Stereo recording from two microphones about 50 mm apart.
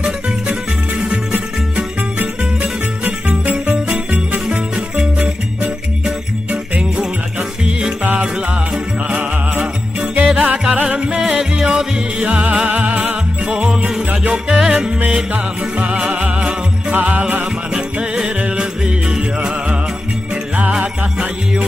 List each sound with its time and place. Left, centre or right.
1.0 s music: right
2.1 s music: right
3.9 s jingle bell: right
4.5 s music: centre
8.7 s music: centre
9.9 s music: right
10.6 s music: centre
12.2 s music: right
13.7 s music: centre; by 17.5 s right
18.6 s music: centre
20.8 s music: right